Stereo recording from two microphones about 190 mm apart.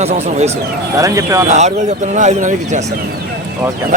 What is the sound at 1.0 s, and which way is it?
Speech, 15° right (ahead or behind).